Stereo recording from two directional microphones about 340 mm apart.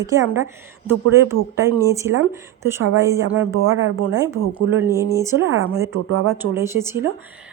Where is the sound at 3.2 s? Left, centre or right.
Right.